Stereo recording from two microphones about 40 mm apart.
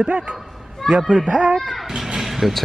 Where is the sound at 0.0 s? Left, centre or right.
Right.